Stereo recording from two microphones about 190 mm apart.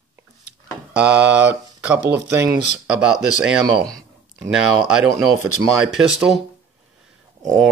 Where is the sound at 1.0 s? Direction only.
65° right (ahead or behind).